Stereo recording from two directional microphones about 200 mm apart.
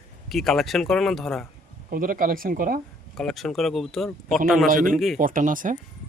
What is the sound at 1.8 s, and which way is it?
Speech, 45° right (ahead or behind).